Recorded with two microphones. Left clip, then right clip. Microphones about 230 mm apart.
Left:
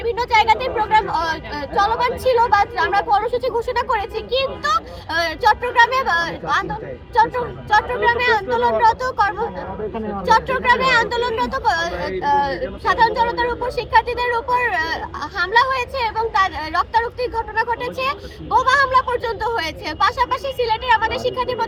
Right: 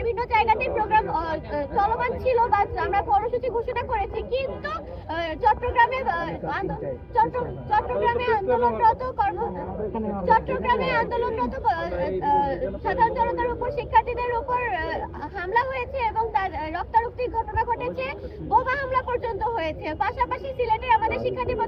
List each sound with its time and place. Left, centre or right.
0.1 s speech: centre
8.0 s speech: left
8.3 s speech: centre
10.6 s speech: left
10.9 s speech: centre